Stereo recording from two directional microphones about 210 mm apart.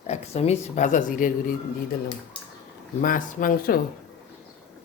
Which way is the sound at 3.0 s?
40° left (ahead or behind).